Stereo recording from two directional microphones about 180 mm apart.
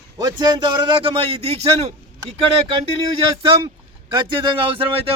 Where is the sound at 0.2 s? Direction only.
20° right (ahead or behind).